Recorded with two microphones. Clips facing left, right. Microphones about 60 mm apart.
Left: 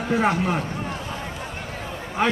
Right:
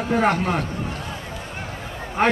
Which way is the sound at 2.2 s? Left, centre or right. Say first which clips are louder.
Right 3 dB; right.